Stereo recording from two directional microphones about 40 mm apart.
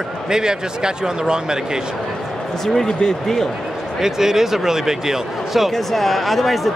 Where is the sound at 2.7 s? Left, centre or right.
Centre.